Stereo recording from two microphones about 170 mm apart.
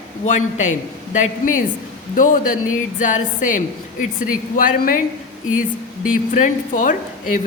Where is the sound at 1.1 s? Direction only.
45° left (ahead or behind).